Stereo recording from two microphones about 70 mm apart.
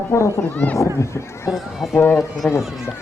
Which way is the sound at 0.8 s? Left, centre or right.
Left.